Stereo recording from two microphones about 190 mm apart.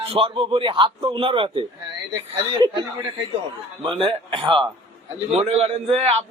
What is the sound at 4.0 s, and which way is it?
A man's voice, 30° right (ahead or behind).